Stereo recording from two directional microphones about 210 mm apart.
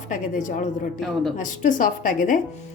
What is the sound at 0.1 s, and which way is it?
Speech, 35° left (ahead or behind).